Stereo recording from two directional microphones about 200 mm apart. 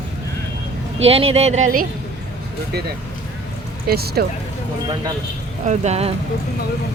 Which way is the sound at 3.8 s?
50° right (ahead or behind).